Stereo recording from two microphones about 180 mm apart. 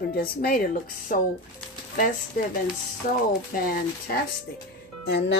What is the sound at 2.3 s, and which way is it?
Speech, 50° left (ahead or behind).